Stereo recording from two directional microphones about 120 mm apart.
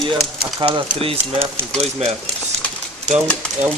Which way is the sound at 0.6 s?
45° right (ahead or behind).